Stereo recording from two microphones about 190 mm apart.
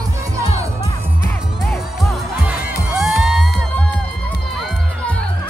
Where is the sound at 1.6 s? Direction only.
Centre (ahead or behind).